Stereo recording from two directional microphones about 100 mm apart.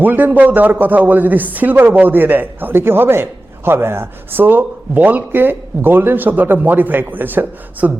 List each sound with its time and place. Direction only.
0.0 s speech: 20° right (ahead or behind)